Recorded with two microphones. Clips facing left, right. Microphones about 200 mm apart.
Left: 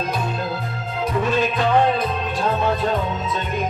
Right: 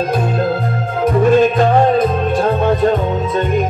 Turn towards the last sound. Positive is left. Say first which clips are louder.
# right 6 dB
turn(degrees=-50)  # may be behind; listen again after turning